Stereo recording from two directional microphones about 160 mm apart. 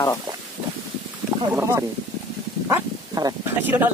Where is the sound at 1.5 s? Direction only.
15° right (ahead or behind).